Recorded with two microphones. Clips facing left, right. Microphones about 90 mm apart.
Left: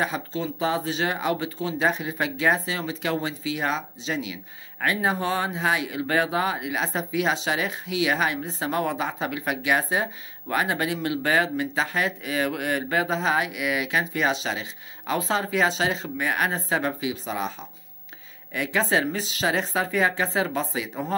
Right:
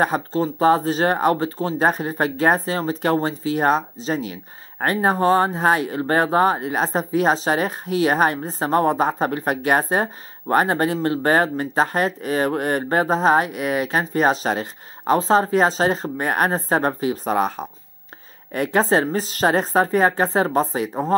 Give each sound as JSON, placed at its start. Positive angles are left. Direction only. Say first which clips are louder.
{"t": 0.0, "sound": "speech", "louder": "right 7 dB", "side_deg": -45}